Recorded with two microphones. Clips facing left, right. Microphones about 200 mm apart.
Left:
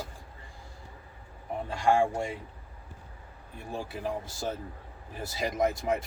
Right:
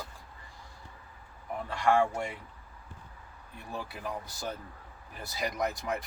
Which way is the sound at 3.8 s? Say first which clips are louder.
Left 4 dB; 25° left (ahead or behind).